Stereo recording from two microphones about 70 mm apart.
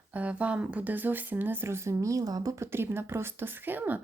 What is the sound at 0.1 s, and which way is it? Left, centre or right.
Speech, centre.